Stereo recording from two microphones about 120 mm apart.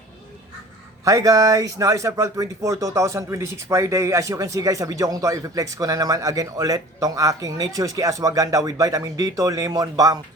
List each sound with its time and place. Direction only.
1.0 s speech: 30° right (ahead or behind)